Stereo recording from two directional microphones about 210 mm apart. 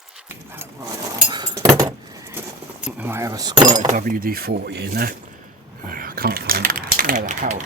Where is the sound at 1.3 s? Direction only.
20° right (ahead or behind).